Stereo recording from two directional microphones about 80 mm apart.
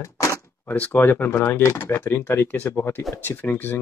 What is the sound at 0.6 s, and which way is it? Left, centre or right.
Speech, left.